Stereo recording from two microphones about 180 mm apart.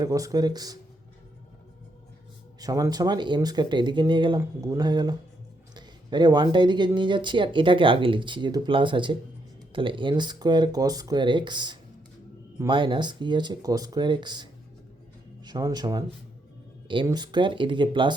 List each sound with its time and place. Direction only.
0.0 s speech: 20° right (ahead or behind)
2.6 s speech: 20° right (ahead or behind)
15.4 s speech: 20° right (ahead or behind)